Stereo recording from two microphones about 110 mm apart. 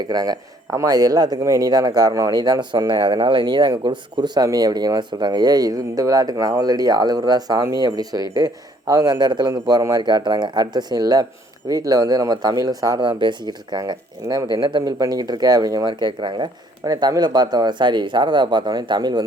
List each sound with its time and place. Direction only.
0.0 s speech: 35° right (ahead or behind)
9.5 s speech: 30° right (ahead or behind)
15.9 s speech: 45° right (ahead or behind)